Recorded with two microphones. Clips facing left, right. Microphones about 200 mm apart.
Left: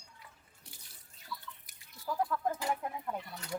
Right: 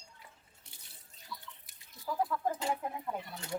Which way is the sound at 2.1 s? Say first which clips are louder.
Even; 5° left (ahead or behind).